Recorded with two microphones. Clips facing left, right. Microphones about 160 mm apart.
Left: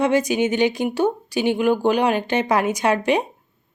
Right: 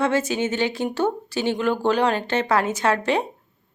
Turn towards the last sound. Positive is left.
turn(degrees=15)  # may be behind; listen again after turning